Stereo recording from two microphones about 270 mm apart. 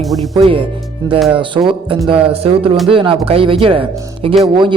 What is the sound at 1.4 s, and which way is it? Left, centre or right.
Speech, centre.